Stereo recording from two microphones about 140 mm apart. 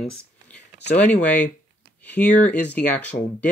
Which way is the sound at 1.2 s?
10° left (ahead or behind).